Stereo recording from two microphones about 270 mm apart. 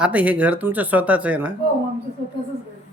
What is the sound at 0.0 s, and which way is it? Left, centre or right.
Speech, centre.